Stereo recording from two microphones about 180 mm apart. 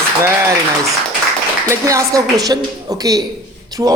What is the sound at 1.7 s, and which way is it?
A woman's voice, 15° right (ahead or behind).